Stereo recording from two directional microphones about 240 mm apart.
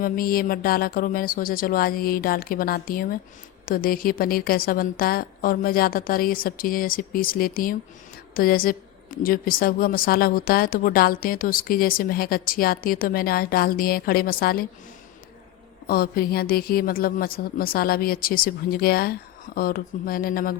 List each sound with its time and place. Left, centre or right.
0.0 s a woman's voice: left
15.9 s a woman's voice: left